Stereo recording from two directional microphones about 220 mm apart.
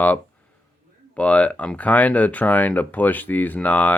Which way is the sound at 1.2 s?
5° left (ahead or behind).